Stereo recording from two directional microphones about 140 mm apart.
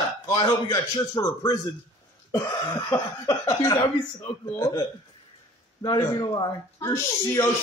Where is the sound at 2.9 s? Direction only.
20° left (ahead or behind).